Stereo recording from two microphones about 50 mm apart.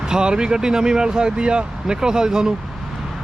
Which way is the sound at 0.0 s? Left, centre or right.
Centre.